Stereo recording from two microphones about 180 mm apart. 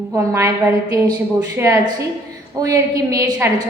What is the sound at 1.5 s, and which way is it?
A woman's voice, 15° right (ahead or behind).